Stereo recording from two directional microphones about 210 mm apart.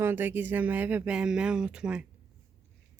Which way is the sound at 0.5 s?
10° right (ahead or behind).